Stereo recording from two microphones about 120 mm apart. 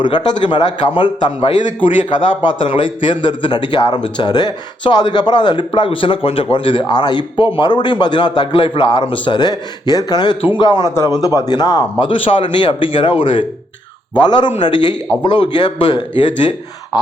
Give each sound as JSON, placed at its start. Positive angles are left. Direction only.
{"t": 0.0, "sound": "a man's voice", "side_deg": 40}